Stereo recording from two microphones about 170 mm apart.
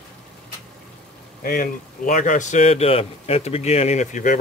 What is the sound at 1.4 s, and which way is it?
A man's voice, 55° left (ahead or behind).